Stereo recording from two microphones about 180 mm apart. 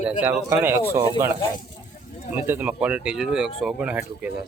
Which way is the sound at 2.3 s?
10° right (ahead or behind).